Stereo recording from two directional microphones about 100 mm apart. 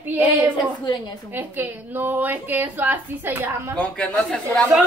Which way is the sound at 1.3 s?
20° right (ahead or behind).